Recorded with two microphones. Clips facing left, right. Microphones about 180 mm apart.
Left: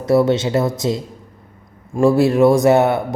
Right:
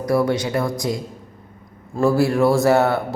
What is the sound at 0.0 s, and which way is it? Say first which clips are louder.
A man's voice: left 4 dB; 25° left (ahead or behind).